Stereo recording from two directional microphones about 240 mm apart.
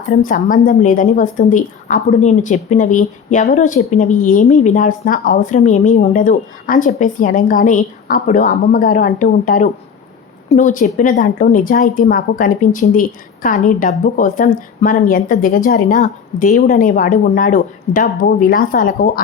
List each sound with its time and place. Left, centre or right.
0.1 s a woman's voice: left